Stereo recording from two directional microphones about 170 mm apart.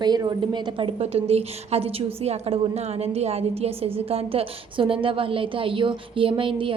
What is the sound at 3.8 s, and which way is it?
A woman's voice, 35° right (ahead or behind).